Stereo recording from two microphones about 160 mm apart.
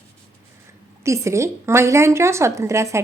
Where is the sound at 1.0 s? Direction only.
20° right (ahead or behind).